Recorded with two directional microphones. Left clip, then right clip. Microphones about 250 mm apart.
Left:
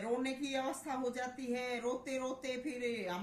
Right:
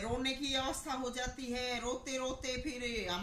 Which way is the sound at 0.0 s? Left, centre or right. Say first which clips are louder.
Right 1 dB; centre.